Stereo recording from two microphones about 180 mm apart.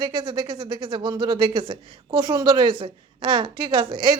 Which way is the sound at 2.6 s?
30° right (ahead or behind).